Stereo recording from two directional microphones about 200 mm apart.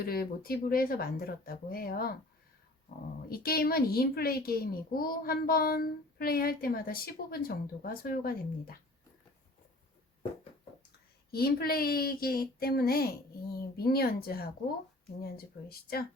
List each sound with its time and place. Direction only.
0.0 s a child's voice: 50° left (ahead or behind)
3.2 s a child's voice: 50° left (ahead or behind)
11.3 s a child's voice: 50° left (ahead or behind)
15.7 s a child's voice: 50° left (ahead or behind)